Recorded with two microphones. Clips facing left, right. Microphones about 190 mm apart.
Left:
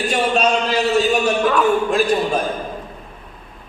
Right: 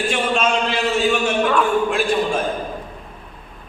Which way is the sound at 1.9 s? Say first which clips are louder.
Left 2 dB; 40° left (ahead or behind).